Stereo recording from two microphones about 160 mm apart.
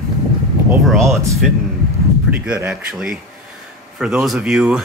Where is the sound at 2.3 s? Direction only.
10° right (ahead or behind).